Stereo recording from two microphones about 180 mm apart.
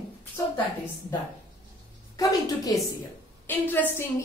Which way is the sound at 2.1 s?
20° left (ahead or behind).